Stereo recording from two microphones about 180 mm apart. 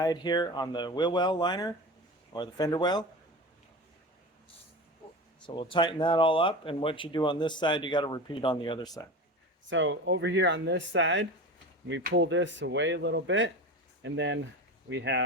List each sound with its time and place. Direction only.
0.0 s speech: 20° left (ahead or behind)
5.5 s speech: 25° left (ahead or behind)
9.6 s speech: 90° right
14.0 s speech: 80° right